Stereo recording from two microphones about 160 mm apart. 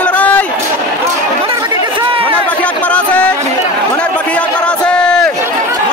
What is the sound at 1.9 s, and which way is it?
Chatter, 35° right (ahead or behind).